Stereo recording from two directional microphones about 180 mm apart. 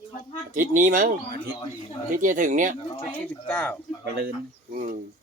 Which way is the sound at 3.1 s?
10° left (ahead or behind).